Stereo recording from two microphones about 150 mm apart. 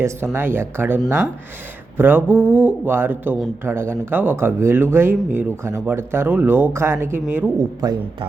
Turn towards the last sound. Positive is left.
turn(degrees=-25)  # may be behind; listen again after turning